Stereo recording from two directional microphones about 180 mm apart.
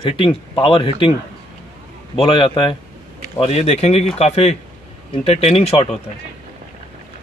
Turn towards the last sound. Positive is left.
turn(degrees=35)  # may be behind; listen again after turning